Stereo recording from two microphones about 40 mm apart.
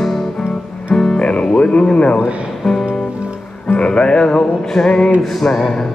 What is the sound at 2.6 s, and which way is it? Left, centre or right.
Music, centre.